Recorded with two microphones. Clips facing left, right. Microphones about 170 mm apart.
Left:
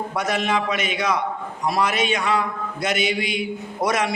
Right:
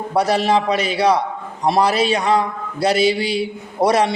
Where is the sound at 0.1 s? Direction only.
35° right (ahead or behind).